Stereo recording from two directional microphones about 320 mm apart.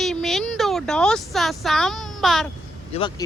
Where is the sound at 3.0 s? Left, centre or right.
Centre.